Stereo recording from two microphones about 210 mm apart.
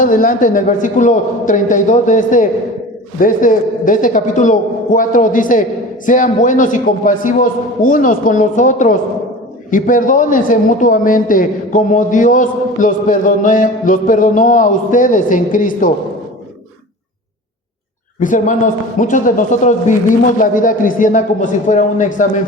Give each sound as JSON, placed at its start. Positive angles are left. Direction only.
{"t": 0.0, "sound": "a man's voice", "side_deg": 40}
{"t": 18.2, "sound": "a man's voice", "side_deg": 40}